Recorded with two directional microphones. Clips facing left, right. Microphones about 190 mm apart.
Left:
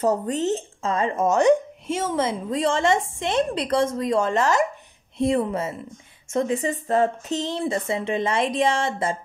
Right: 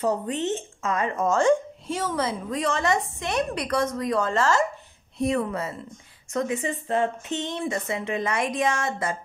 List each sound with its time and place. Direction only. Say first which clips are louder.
0.0 s speech: left 3 dB; 40° left (ahead or behind)